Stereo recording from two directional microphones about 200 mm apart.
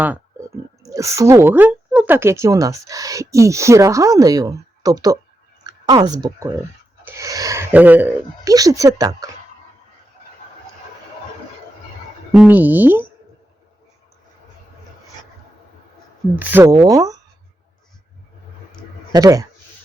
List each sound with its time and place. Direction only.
0.0 s a woman's voice: 10° right (ahead or behind)
12.3 s speech: 5° right (ahead or behind)
16.3 s speech: 10° right (ahead or behind)
19.1 s speech: 20° right (ahead or behind)